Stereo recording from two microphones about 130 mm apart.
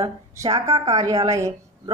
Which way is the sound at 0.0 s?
25° right (ahead or behind).